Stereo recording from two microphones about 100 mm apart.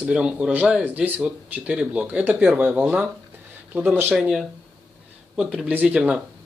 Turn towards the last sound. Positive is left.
turn(degrees=-10)  # may be behind; listen again after turning